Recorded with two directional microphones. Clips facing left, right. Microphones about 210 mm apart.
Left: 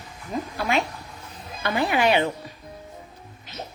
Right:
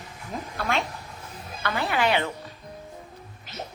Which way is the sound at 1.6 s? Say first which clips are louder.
Left 4 dB; 15° left (ahead or behind).